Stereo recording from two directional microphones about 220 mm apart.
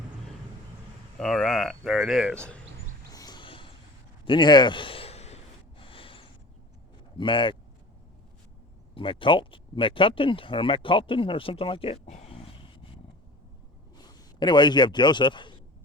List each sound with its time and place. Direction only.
1.2 s speech: centre (ahead or behind)
3.1 s a sound: 20° left (ahead or behind)
7.2 s speech: 20° left (ahead or behind)
9.0 s a man's voice: 25° left (ahead or behind)